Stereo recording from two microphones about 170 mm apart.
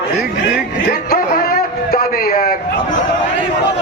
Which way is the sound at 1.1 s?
60° left (ahead or behind).